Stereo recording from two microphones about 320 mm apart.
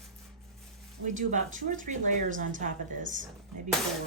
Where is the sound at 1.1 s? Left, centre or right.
Right.